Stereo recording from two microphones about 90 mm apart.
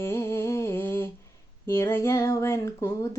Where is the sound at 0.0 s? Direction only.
30° left (ahead or behind).